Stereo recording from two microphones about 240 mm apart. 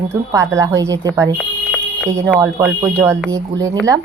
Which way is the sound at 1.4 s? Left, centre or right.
Centre.